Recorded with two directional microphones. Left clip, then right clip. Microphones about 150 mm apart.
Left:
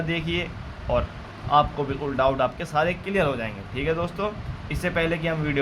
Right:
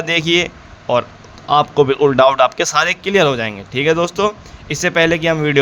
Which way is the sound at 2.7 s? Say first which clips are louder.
Right 9 dB; 90° right.